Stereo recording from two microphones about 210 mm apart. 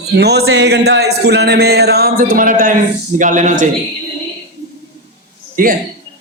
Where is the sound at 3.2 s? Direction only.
35° right (ahead or behind).